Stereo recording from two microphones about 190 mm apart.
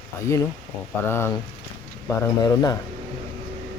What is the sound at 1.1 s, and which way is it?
Speech, 10° left (ahead or behind).